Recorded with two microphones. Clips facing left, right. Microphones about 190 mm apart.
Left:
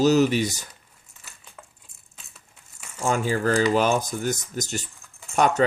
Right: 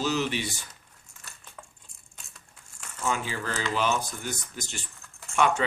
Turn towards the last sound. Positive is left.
turn(degrees=40)  # may be behind; listen again after turning